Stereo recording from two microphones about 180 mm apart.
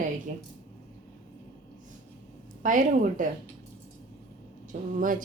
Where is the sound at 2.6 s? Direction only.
45° right (ahead or behind).